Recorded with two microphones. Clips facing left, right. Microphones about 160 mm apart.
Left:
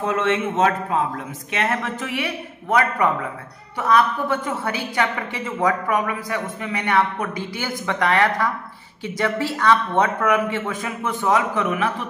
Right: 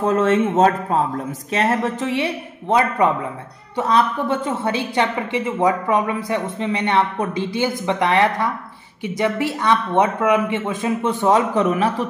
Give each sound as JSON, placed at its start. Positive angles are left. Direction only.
{"t": 0.0, "sound": "a woman's voice", "side_deg": -40}